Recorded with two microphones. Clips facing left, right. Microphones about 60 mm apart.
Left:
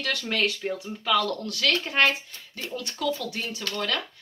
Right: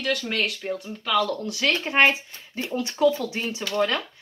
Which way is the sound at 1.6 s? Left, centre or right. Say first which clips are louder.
Right 3 dB; right.